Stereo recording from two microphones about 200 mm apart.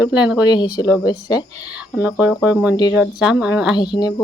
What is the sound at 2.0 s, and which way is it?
Speech, 5° right (ahead or behind).